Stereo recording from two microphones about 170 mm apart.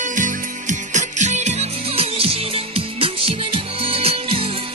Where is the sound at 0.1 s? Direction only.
50° right (ahead or behind).